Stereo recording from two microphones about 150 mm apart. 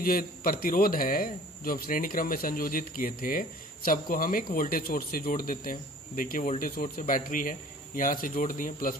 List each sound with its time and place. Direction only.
0.0 s a man's voice: 75° left (ahead or behind)